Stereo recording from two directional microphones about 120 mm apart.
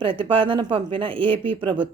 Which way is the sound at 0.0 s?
45° right (ahead or behind).